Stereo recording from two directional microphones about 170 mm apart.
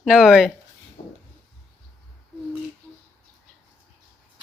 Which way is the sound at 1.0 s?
45° left (ahead or behind).